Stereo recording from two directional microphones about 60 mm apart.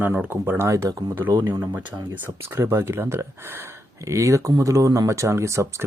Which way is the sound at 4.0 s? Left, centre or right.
Right.